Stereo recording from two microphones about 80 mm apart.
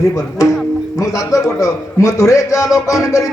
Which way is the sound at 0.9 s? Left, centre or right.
Left.